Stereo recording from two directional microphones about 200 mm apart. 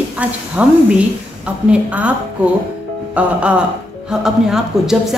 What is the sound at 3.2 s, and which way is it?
Speech, 5° right (ahead or behind).